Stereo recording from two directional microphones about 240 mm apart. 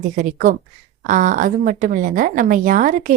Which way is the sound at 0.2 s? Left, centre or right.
Right.